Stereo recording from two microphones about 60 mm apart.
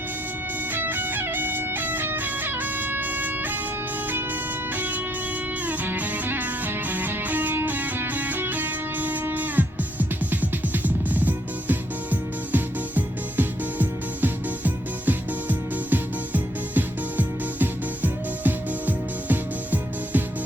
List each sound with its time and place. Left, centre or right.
0.7 s music: right
4.7 s music: right